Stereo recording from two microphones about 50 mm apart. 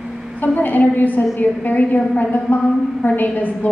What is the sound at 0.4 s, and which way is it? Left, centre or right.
A woman's voice, left.